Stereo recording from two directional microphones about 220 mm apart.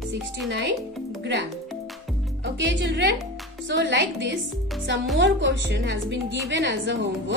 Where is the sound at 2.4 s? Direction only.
55° right (ahead or behind).